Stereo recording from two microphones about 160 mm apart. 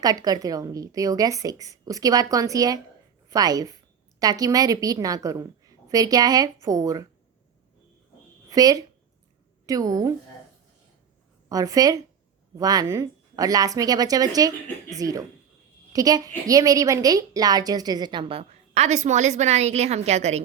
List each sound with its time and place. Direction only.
0.0 s a woman's voice: 25° right (ahead or behind)
8.4 s a woman's voice: 25° right (ahead or behind)
11.4 s a woman's voice: 20° right (ahead or behind); by 20.4 s 45° right (ahead or behind)